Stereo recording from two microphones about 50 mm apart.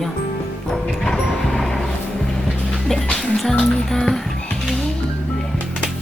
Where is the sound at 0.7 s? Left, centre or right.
Centre.